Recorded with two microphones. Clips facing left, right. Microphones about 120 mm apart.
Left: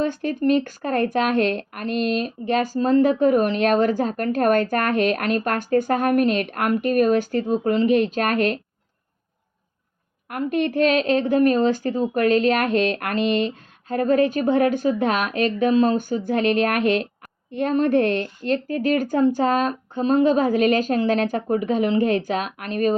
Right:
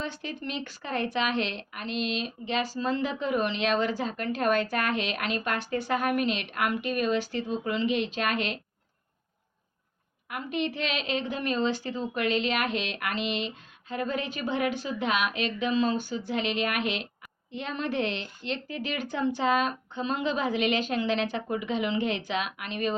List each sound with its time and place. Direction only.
0.0 s a woman's voice: 50° left (ahead or behind)
10.2 s a woman's voice: 50° left (ahead or behind)